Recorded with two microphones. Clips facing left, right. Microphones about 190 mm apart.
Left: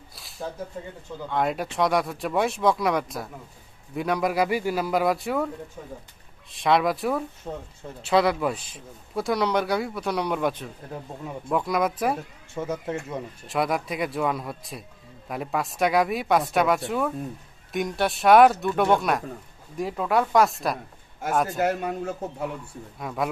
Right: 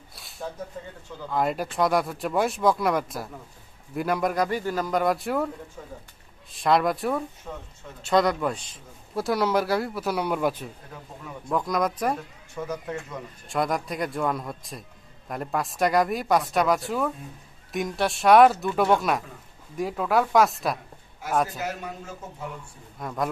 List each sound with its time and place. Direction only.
0.1 s a sound: centre (ahead or behind)
1.3 s speech: centre (ahead or behind)
6.5 s speech: centre (ahead or behind)
7.5 s speech: 25° left (ahead or behind)
8.0 s speech: 5° left (ahead or behind)
12.5 s speech: 25° left (ahead or behind)
13.5 s speech: 5° left (ahead or behind)
21.5 s a man's voice: 55° left (ahead or behind)
22.9 s speech: 5° left (ahead or behind)